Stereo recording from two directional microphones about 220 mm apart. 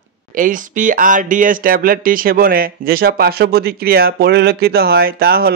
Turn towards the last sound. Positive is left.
turn(degrees=-45)  # may be behind; listen again after turning